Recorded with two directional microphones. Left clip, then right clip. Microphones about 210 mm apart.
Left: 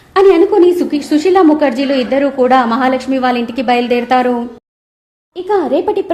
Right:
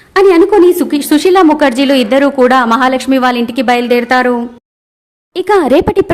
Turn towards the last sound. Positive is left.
turn(degrees=-40)  # may be behind; listen again after turning